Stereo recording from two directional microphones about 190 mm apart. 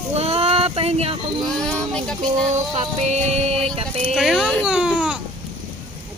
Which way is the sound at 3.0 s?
35° right (ahead or behind).